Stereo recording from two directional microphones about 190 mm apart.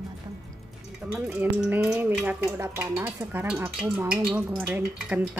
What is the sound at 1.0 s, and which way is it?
Speech, 5° right (ahead or behind).